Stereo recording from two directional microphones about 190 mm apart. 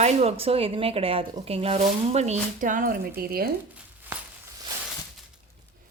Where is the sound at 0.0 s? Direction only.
35° right (ahead or behind); by 3.5 s 55° right (ahead or behind).